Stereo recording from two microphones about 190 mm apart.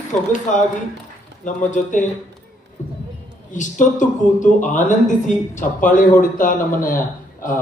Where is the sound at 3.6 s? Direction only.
40° left (ahead or behind).